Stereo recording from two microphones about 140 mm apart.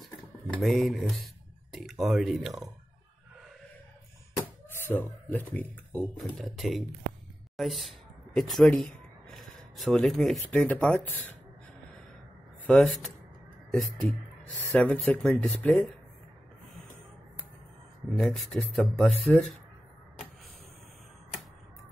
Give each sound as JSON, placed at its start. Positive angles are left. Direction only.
{"t": 0.0, "sound": "speech", "side_deg": 0}
{"t": 4.7, "sound": "speech", "side_deg": 15}
{"t": 12.6, "sound": "speech", "side_deg": 5}
{"t": 18.1, "sound": "speech", "side_deg": 0}